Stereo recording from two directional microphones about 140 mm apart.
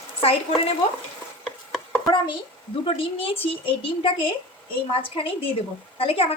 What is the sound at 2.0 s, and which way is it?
A woman's voice, 35° left (ahead or behind).